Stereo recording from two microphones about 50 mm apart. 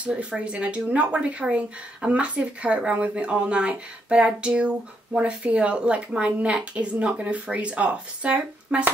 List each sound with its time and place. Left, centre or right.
0.0 s a woman's voice: right